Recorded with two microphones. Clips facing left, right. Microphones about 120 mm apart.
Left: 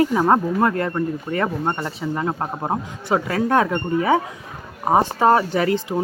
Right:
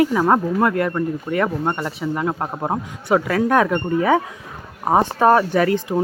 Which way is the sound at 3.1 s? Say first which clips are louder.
Right 2 dB; 25° left (ahead or behind).